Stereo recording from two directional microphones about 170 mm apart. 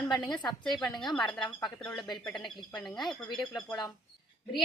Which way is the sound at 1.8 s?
5° left (ahead or behind).